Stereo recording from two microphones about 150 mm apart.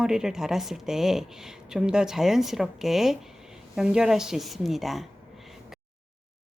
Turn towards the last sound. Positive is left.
turn(degrees=0)  # may be behind; listen again after turning